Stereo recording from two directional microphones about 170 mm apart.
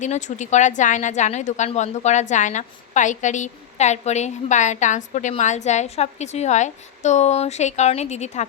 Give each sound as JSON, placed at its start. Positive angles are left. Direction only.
{"t": 0.0, "sound": "a woman's voice", "side_deg": 45}